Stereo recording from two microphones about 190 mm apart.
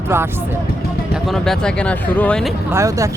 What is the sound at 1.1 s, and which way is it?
Speech, centre (ahead or behind).